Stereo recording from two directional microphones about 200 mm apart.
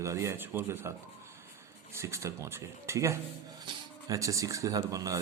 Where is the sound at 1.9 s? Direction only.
15° right (ahead or behind).